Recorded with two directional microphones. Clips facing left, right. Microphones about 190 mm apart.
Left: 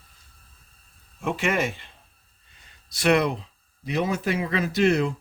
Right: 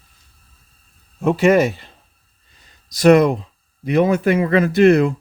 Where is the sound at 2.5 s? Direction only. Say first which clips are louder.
Right 2 dB; 40° right (ahead or behind).